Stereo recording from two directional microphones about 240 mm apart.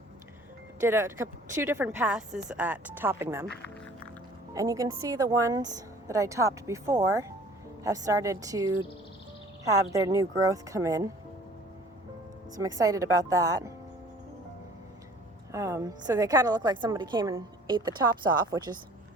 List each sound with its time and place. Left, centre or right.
0.8 s a woman's voice: centre
3.4 s music: centre
4.5 s a woman's voice: centre
12.5 s a woman's voice: centre
15.5 s a woman's voice: centre